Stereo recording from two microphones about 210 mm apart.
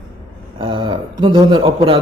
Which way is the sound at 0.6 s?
25° right (ahead or behind).